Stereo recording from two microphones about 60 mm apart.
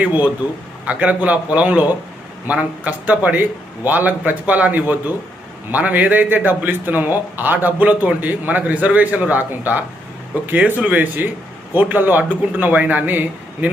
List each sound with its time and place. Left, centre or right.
0.0 s a man's voice: right